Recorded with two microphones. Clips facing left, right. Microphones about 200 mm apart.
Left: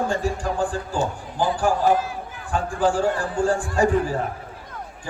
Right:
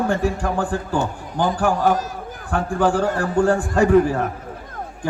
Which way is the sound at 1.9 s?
40° right (ahead or behind).